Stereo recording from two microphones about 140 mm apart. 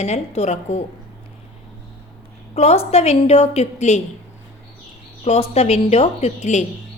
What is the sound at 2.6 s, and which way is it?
A woman's voice, 50° left (ahead or behind).